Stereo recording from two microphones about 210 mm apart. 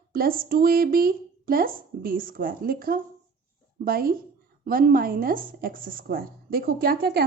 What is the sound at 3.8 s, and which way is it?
A woman's voice, 45° right (ahead or behind).